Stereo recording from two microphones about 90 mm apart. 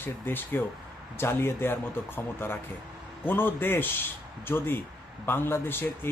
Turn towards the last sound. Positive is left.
turn(degrees=25)  # may be behind; listen again after turning